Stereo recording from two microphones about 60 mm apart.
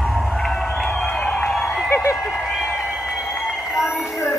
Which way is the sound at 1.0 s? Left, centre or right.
Centre.